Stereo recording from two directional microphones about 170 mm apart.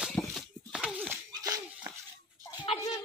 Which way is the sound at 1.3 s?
20° right (ahead or behind).